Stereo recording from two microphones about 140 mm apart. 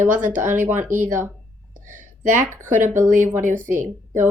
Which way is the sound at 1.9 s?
65° right (ahead or behind).